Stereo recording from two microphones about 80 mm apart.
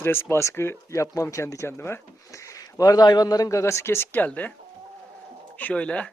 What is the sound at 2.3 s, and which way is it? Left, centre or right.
Speech, left.